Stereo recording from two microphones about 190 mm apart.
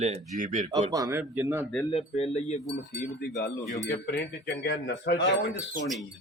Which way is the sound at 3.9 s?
55° left (ahead or behind).